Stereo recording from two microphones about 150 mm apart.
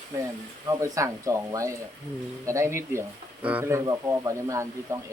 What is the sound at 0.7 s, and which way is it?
Speech, 20° right (ahead or behind).